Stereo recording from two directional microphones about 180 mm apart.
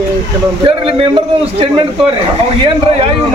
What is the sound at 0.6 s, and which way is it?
A man's voice, 30° right (ahead or behind).